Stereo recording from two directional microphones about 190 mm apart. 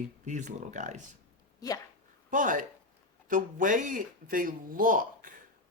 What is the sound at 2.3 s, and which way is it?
Speech, 45° right (ahead or behind).